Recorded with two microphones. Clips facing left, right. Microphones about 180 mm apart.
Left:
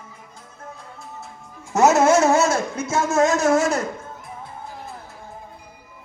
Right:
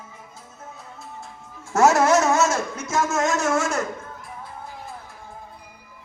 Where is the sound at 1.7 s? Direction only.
20° left (ahead or behind).